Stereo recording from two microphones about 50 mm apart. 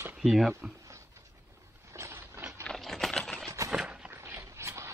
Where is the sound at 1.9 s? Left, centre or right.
Right.